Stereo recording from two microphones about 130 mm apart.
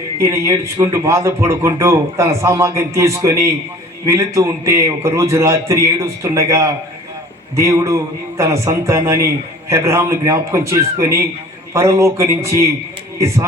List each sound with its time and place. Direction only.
0.2 s a man's voice: 25° right (ahead or behind)